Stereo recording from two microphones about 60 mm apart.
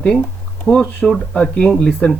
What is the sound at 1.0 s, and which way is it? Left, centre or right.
Speech, centre.